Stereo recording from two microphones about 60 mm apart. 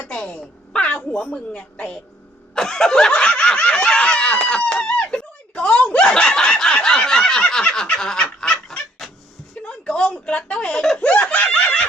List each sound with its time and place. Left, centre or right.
0.1 s a woman's voice: centre
2.6 s snicker: centre
7.6 s a sound: centre
9.6 s speech: centre